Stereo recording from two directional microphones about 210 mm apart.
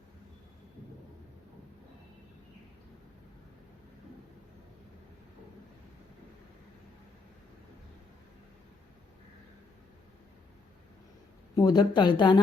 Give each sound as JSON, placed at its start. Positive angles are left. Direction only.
{"t": 11.5, "sound": "a woman's voice", "side_deg": 20}